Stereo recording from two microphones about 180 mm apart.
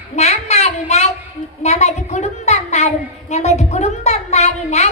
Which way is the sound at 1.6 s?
40° left (ahead or behind).